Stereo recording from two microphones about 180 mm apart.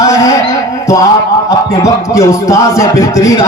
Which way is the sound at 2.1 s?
15° left (ahead or behind).